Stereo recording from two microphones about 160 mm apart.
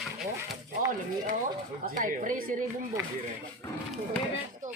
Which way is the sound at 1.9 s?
55° right (ahead or behind).